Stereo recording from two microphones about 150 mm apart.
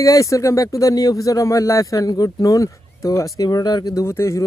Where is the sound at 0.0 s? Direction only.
20° left (ahead or behind).